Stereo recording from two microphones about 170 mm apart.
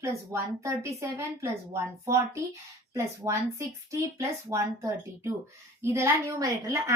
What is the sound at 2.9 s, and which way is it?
A woman's voice, 15° right (ahead or behind).